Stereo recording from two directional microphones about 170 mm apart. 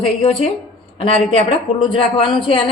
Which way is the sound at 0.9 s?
35° left (ahead or behind).